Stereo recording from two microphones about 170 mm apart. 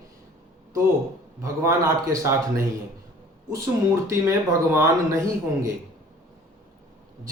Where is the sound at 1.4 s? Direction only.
20° right (ahead or behind).